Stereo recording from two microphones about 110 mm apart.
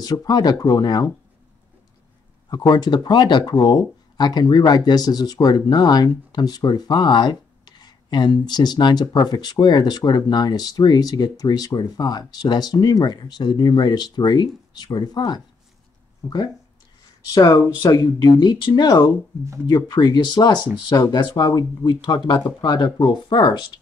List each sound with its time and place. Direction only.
0.0 s speech: 35° left (ahead or behind)
2.5 s speech: 40° left (ahead or behind)
17.3 s speech: 35° left (ahead or behind)